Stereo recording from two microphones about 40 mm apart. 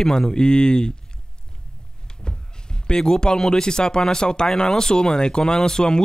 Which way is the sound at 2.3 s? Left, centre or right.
Left.